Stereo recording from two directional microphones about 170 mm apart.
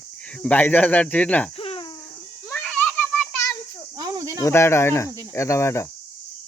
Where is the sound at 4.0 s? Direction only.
20° right (ahead or behind).